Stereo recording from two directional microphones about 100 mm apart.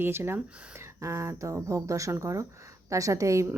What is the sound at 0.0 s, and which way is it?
Speech, 25° right (ahead or behind).